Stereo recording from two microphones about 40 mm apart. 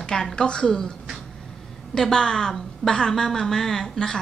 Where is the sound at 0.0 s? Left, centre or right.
Centre.